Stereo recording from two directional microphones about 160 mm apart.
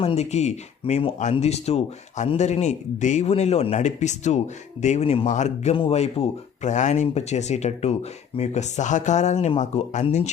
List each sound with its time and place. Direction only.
0.0 s speech: 40° left (ahead or behind)
5.7 s speech: 35° left (ahead or behind)